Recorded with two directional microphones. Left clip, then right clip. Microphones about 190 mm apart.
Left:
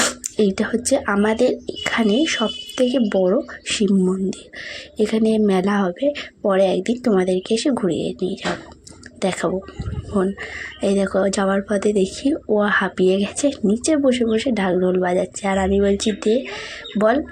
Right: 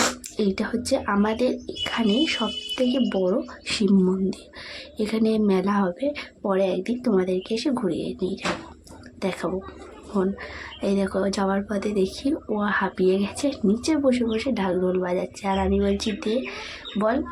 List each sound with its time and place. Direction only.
0.3 s speech: 15° left (ahead or behind)
4.9 s speech: 15° left (ahead or behind)